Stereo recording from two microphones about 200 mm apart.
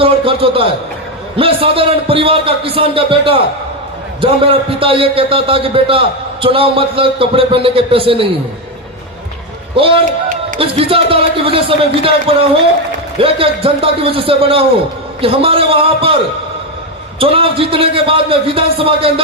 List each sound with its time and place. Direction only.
0.0 s a sound: 25° right (ahead or behind)
1.4 s a man's voice: 25° right (ahead or behind)
9.7 s a man's voice: 25° right (ahead or behind)
17.2 s a man's voice: 30° right (ahead or behind)